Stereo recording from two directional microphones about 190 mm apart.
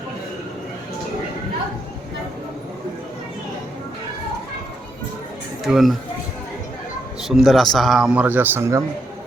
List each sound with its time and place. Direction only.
5.6 s a man's voice: centre (ahead or behind)
7.2 s a man's voice: centre (ahead or behind)